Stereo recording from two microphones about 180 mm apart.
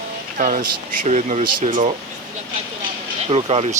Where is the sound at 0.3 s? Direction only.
50° right (ahead or behind).